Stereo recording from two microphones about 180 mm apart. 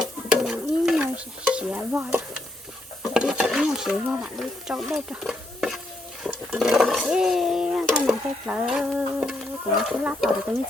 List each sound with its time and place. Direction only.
0.0 s stir: 5° right (ahead or behind)
3.0 s dishes: 5° right (ahead or behind)
6.2 s speech: centre (ahead or behind)